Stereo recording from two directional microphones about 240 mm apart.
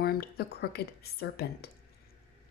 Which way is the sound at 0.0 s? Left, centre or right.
Left.